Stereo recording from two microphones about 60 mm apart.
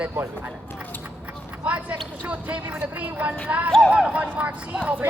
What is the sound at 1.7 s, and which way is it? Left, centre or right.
Speech, right.